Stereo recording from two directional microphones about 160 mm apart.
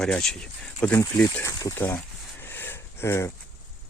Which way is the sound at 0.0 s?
5° left (ahead or behind).